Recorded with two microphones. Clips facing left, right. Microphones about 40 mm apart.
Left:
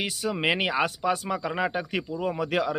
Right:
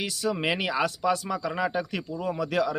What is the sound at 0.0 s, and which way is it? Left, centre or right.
Speech, left.